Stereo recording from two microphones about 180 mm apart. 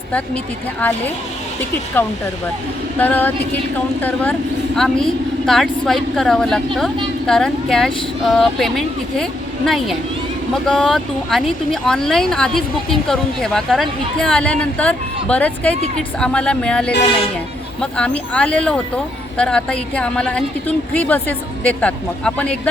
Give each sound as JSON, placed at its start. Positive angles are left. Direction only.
{"t": 0.8, "sound": "a woman's voice", "side_deg": 10}
{"t": 3.0, "sound": "a woman's voice", "side_deg": 10}